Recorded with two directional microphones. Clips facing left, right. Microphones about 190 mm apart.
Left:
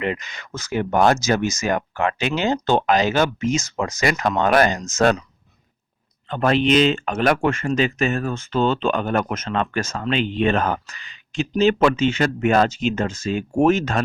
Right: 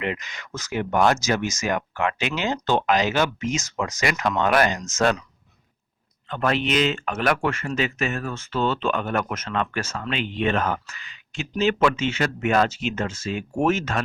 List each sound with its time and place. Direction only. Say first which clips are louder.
0.0 s speech: left 3 dB; 35° left (ahead or behind)
6.2 s speech: left 5 dB; 30° left (ahead or behind)